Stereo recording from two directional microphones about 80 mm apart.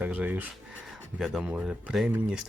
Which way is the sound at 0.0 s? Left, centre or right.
Centre.